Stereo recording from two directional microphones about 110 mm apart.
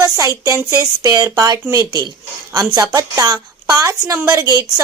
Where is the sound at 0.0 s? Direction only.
30° right (ahead or behind).